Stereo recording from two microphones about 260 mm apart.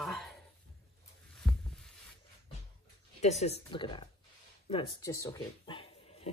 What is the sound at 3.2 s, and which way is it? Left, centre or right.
Speech, left.